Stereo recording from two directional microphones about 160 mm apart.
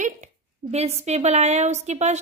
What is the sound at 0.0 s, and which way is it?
A woman's voice, 45° right (ahead or behind).